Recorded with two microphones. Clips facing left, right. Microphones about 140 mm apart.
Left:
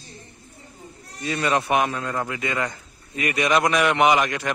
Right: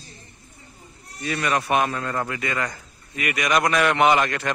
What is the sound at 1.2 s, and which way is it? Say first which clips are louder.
A man's voice: left 1 dB; 25° left (ahead or behind).